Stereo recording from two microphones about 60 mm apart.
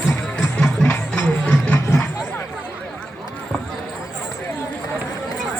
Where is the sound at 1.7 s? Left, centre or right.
Left.